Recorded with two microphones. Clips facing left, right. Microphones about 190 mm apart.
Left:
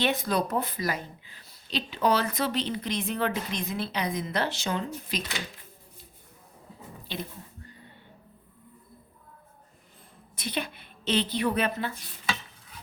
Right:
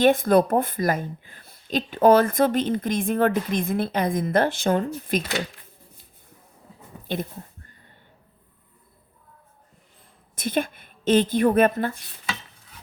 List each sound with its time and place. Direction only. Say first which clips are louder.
0.0 s speech: right 10 dB; 50° right (ahead or behind)
7.1 s a sound: right 8 dB; 50° right (ahead or behind)
10.3 s a woman's voice: right 8 dB; 50° right (ahead or behind)